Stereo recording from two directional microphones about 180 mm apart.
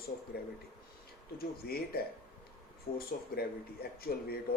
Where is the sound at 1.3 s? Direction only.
60° left (ahead or behind).